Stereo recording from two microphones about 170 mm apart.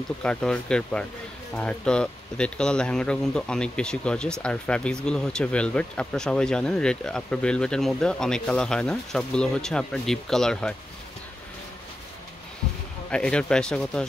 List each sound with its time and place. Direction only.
0.2 s speech: 5° left (ahead or behind)
13.1 s speech: 5° left (ahead or behind)